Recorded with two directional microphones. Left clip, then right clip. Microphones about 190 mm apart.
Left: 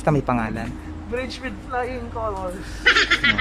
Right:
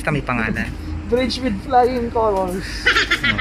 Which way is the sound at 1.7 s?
45° right (ahead or behind).